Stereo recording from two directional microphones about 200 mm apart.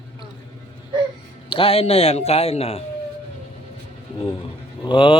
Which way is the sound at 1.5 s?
30° left (ahead or behind).